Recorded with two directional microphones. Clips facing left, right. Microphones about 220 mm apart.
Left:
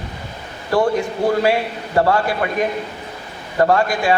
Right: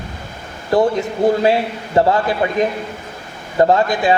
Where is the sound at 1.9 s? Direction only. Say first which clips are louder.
Right 2 dB; 20° right (ahead or behind).